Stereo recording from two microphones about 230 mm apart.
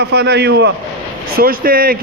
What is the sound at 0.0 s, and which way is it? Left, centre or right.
A man's voice, right.